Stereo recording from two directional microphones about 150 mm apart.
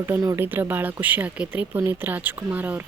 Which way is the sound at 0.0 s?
25° right (ahead or behind).